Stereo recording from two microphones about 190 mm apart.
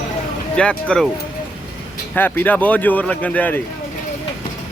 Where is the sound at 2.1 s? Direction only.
10° left (ahead or behind).